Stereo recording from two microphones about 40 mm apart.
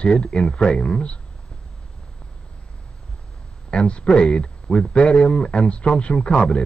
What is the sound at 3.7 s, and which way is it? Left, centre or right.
Speech, left.